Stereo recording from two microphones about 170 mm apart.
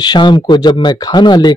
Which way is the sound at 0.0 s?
25° left (ahead or behind).